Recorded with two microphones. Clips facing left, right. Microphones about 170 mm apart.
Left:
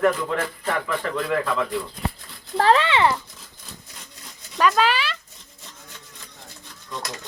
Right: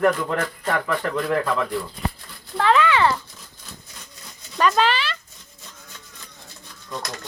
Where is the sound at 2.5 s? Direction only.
35° left (ahead or behind).